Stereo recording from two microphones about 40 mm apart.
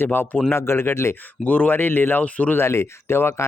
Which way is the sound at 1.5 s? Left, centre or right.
Left.